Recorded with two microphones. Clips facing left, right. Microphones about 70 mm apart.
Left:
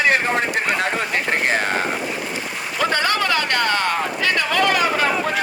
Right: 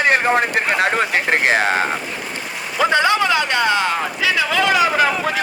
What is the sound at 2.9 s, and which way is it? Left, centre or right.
Speech, centre.